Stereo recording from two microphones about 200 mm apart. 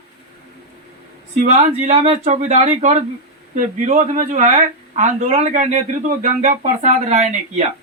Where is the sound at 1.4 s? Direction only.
35° right (ahead or behind).